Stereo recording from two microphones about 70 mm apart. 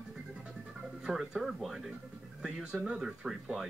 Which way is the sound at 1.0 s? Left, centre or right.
Centre.